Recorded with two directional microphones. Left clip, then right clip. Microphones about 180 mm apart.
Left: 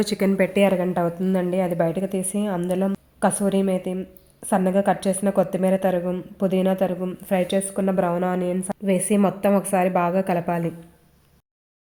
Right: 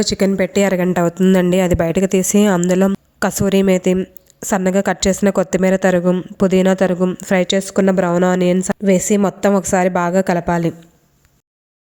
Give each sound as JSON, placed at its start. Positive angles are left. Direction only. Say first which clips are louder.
{"t": 0.0, "sound": "a woman's voice", "louder": "right 5 dB", "side_deg": -25}